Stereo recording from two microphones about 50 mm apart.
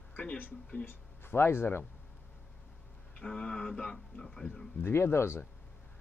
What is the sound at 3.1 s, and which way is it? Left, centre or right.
Speech, centre.